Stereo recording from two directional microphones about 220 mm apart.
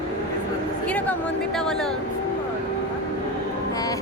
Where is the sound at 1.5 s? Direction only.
Centre (ahead or behind).